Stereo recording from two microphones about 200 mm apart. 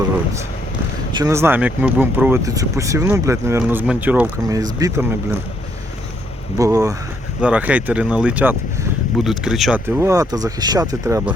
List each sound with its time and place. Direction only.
1.1 s speech: 15° right (ahead or behind)
6.6 s speech: 15° right (ahead or behind); by 9.8 s centre (ahead or behind)
10.0 s speech: 15° right (ahead or behind)